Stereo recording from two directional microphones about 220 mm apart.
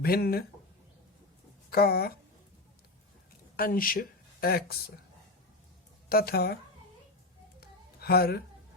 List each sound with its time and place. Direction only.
0.0 s speech: 45° left (ahead or behind)
1.7 s speech: 45° left (ahead or behind)
3.6 s speech: 40° left (ahead or behind)
6.1 s speech: 45° left (ahead or behind)
7.6 s a sound: 45° left (ahead or behind)